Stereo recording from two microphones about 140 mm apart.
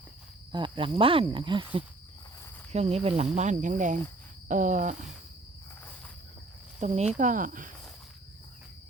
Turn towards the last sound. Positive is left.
turn(degrees=-70)  # may be behind; listen again after turning